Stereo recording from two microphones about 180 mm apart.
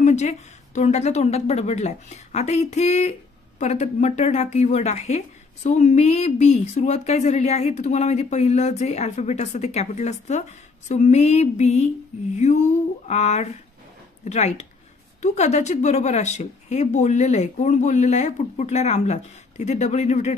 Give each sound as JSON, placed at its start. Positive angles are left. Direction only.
{"t": 0.0, "sound": "a woman's voice", "side_deg": 40}